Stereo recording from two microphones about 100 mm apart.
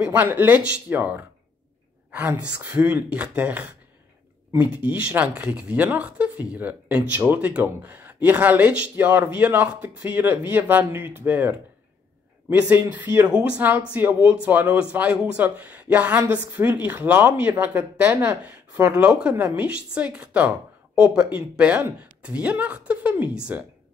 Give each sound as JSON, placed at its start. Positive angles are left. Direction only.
{"t": 0.0, "sound": "speech", "side_deg": -15}
{"t": 2.0, "sound": "a sound", "side_deg": -15}
{"t": 2.4, "sound": "speech", "side_deg": -15}